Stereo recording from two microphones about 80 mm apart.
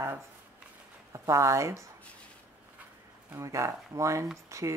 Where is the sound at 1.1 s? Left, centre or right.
Right.